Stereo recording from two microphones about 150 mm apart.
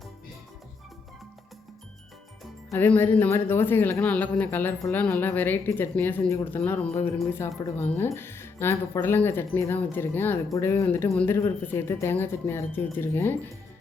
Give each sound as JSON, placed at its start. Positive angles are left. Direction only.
{"t": 2.7, "sound": "speech", "side_deg": 15}